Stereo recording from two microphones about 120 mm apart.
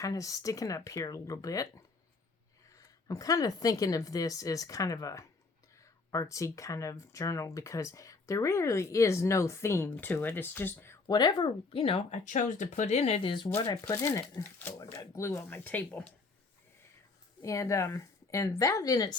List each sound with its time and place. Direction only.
0.0 s speech: 30° left (ahead or behind)
11.0 s speech: 35° left (ahead or behind); by 12.2 s 50° left (ahead or behind)
12.2 s speech: 90° left; by 13.2 s 60° left (ahead or behind)
13.2 s speech: 40° left (ahead or behind)
13.8 s speech: 25° left (ahead or behind)
17.4 s speech: 25° left (ahead or behind)